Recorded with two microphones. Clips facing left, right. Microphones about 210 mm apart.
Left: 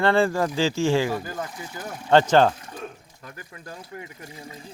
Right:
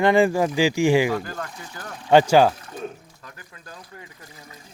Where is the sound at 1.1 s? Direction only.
15° left (ahead or behind).